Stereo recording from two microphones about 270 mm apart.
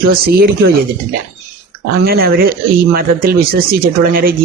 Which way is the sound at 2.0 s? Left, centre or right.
Right.